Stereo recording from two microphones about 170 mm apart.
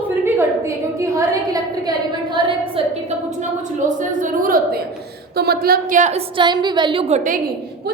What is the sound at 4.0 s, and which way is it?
Speech, 50° right (ahead or behind).